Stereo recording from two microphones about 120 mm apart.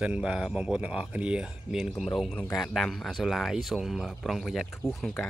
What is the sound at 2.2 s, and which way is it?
Speech, 5° left (ahead or behind).